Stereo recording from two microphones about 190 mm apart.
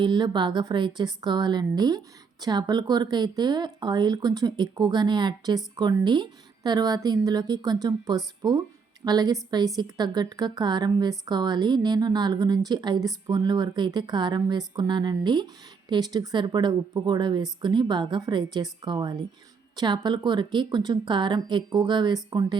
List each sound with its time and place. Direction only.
0.0 s speech: 25° right (ahead or behind)